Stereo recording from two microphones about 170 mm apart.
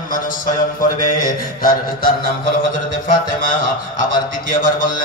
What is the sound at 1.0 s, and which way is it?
Speech, 55° left (ahead or behind).